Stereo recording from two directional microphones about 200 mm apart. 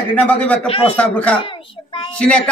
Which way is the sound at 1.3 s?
25° left (ahead or behind).